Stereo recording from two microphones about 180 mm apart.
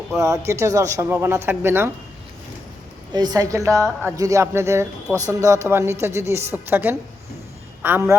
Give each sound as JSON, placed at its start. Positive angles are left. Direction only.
{"t": 0.2, "sound": "a woman's voice", "side_deg": -15}
{"t": 3.1, "sound": "a woman's voice", "side_deg": -25}